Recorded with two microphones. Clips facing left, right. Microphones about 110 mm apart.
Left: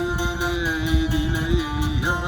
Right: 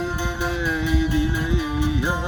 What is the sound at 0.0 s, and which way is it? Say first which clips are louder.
Music: left 1 dB; 10° left (ahead or behind).